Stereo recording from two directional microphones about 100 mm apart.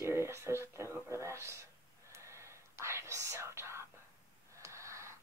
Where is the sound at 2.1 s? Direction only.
30° right (ahead or behind).